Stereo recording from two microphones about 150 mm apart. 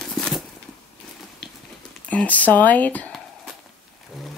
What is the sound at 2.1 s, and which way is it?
Speech, 10° left (ahead or behind).